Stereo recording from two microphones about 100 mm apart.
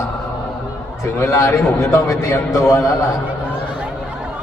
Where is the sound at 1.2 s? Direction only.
30° left (ahead or behind).